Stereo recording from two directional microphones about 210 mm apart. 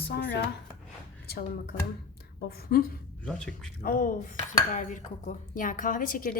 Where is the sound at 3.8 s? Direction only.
40° left (ahead or behind).